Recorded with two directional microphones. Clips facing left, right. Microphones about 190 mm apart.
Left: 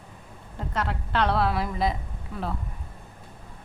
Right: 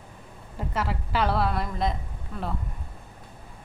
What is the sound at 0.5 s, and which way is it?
A woman's voice, 5° right (ahead or behind).